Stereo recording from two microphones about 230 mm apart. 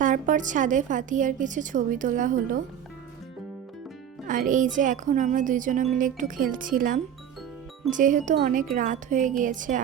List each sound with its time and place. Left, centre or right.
0.0 s speech: right
4.3 s speech: right